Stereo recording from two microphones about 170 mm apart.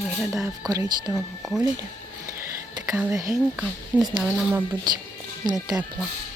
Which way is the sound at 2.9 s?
10° right (ahead or behind).